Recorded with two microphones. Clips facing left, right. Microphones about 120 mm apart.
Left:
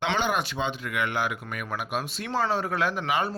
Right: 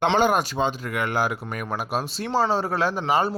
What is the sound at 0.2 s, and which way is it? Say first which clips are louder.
Speech: right 6 dB; 40° right (ahead or behind).